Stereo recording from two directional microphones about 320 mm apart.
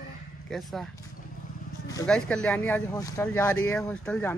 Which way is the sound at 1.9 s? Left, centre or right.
Centre.